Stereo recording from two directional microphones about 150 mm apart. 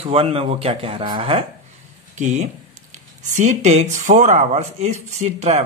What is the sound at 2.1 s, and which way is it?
Speech, 55° right (ahead or behind).